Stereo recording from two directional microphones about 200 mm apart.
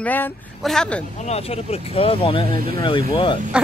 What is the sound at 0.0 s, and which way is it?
Speech, 10° left (ahead or behind).